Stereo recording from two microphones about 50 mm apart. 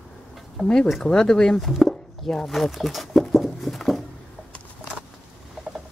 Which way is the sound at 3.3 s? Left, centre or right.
Centre.